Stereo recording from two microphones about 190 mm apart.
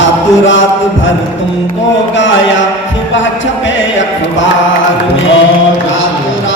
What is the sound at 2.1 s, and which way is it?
Carnatic music, 75° left (ahead or behind).